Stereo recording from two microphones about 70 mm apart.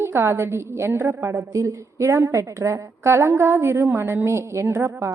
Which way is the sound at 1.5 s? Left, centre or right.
Right.